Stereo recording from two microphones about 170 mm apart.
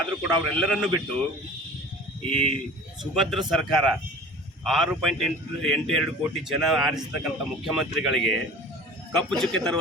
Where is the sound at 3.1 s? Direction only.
Centre (ahead or behind).